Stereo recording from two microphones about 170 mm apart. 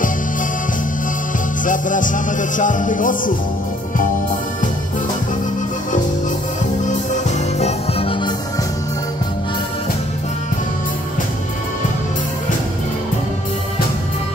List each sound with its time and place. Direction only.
1.6 s music: 50° left (ahead or behind)
6.8 s music: 45° left (ahead or behind)